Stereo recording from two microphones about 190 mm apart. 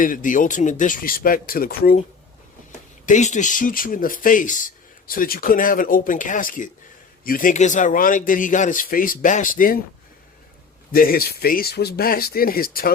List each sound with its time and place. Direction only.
0.0 s speech: 45° left (ahead or behind)
3.1 s speech: 40° left (ahead or behind)
10.9 s speech: 50° left (ahead or behind)